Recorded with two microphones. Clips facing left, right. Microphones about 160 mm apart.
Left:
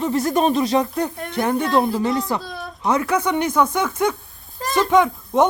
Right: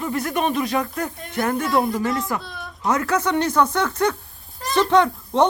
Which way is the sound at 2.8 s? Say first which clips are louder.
Left 1 dB; 10° left (ahead or behind).